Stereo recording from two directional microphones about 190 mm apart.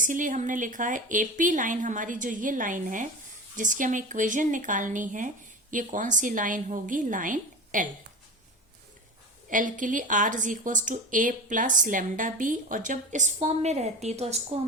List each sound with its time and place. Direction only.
0.0 s speech: 45° right (ahead or behind)
9.5 s speech: 45° right (ahead or behind)